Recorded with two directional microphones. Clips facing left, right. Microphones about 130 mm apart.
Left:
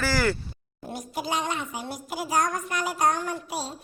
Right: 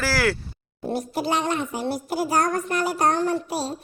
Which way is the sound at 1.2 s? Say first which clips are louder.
Right 4 dB; 55° right (ahead or behind).